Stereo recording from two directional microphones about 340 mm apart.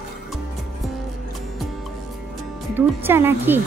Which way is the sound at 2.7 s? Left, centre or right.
Centre.